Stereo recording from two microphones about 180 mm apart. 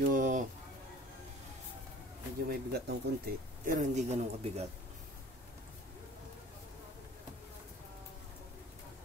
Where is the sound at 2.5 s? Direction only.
60° right (ahead or behind).